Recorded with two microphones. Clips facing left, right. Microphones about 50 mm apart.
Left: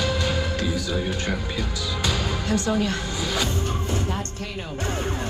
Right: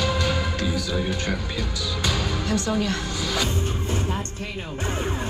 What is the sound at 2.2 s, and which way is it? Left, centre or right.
Music, left.